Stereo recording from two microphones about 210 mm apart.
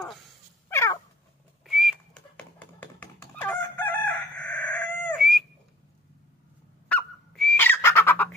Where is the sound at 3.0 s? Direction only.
10° left (ahead or behind).